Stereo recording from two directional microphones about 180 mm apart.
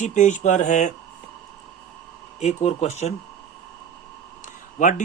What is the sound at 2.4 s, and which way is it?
Speech, 35° left (ahead or behind).